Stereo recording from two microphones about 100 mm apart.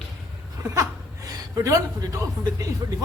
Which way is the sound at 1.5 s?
30° right (ahead or behind).